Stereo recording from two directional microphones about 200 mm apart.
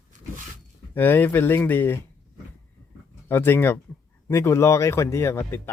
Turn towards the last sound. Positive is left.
turn(degrees=10)  # may be behind; listen again after turning